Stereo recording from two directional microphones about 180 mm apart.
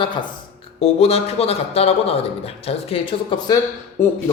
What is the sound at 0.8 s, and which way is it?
A man's voice, 35° left (ahead or behind).